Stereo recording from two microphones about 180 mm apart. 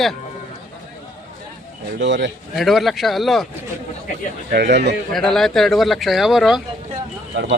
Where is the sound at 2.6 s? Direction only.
Centre (ahead or behind).